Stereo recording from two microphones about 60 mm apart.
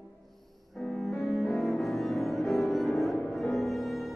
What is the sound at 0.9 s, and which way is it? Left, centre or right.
Cello, centre.